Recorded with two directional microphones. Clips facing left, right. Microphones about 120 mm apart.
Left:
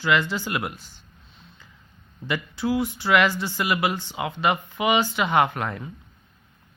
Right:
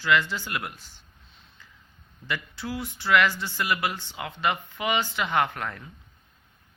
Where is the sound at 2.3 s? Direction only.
15° left (ahead or behind).